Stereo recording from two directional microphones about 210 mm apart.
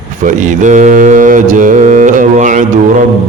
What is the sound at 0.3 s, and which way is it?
Mantra, 35° right (ahead or behind).